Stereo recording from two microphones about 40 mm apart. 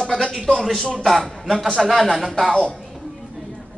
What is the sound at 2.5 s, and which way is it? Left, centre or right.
Speech, left.